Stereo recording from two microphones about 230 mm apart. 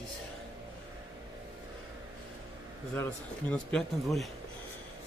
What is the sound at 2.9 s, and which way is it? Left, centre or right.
Speech, centre.